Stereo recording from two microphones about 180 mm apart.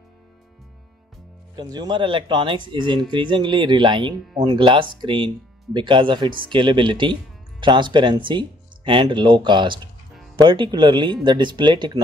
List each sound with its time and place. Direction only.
1.6 s speech: 25° right (ahead or behind)